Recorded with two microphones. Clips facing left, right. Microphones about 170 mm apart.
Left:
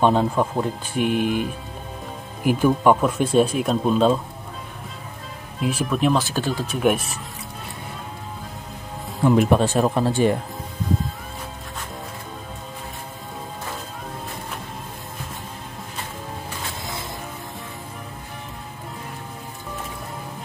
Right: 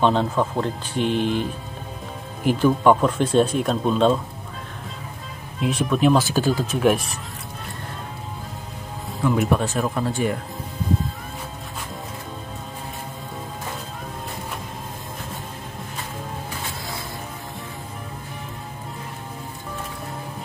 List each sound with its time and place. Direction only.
0.0 s speech: 10° left (ahead or behind)
5.6 s speech: 5° left (ahead or behind)
9.2 s speech: 30° left (ahead or behind)